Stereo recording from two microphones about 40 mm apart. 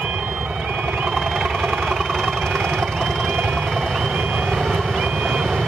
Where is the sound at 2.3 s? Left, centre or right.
Centre.